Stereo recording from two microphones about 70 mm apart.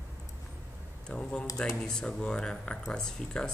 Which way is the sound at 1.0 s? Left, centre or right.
Centre.